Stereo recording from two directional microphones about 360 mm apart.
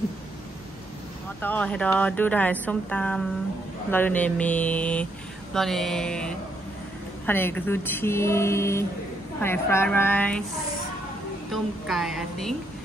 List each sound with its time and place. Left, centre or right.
1.4 s speech: centre
11.5 s speech: centre